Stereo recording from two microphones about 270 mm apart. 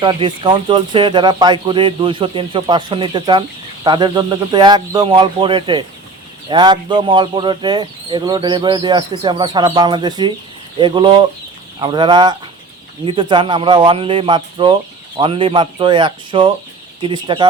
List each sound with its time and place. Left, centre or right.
0.0 s speech: centre